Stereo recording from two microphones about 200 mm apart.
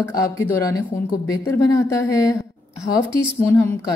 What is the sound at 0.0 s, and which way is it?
A woman's voice, 15° left (ahead or behind).